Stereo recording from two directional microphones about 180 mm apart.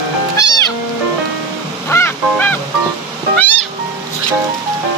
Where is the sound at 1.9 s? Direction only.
10° left (ahead or behind).